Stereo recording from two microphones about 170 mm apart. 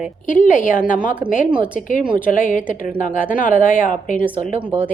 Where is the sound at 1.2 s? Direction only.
5° right (ahead or behind).